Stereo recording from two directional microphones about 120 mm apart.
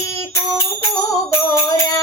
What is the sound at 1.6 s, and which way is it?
Music, 30° left (ahead or behind).